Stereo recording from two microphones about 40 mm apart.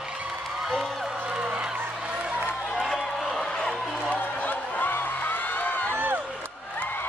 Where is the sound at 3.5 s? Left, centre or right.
Centre.